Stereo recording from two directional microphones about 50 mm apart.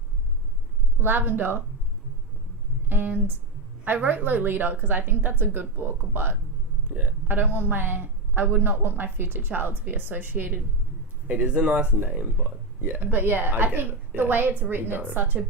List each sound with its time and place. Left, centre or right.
1.0 s speech: right
2.9 s a woman's voice: right
11.3 s speech: right
11.9 s a woman's voice: right